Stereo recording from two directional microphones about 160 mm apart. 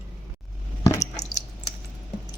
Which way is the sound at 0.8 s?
20° left (ahead or behind).